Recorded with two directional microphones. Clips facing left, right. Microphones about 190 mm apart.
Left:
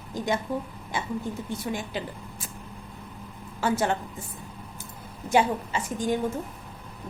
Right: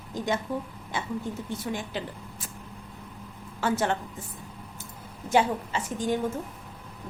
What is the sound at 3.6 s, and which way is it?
Speech, 10° left (ahead or behind).